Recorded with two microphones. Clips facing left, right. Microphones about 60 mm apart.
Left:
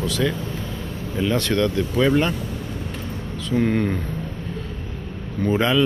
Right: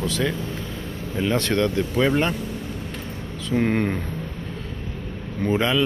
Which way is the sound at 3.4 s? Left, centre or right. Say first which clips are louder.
Left 1 dB; right.